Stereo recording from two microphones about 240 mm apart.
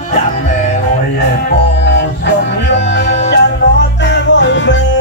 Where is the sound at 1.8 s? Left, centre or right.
Left.